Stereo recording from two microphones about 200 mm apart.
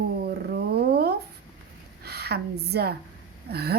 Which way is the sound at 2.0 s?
55° right (ahead or behind).